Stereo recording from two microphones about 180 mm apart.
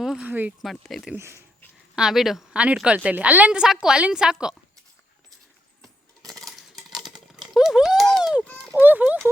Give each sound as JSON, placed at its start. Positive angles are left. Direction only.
{"t": 0.0, "sound": "a woman's voice", "side_deg": -5}
{"t": 1.1, "sound": "speech", "side_deg": -15}
{"t": 2.0, "sound": "a woman's voice", "side_deg": 0}
{"t": 5.8, "sound": "a sound", "side_deg": 0}
{"t": 8.7, "sound": "speech", "side_deg": -10}